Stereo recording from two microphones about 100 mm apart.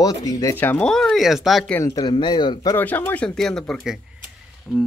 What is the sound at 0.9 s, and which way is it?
Speech, 5° left (ahead or behind).